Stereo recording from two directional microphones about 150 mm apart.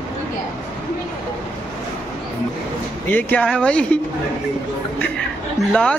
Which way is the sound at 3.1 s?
5° left (ahead or behind).